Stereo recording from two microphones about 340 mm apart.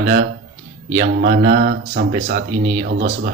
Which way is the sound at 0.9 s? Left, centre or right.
Right.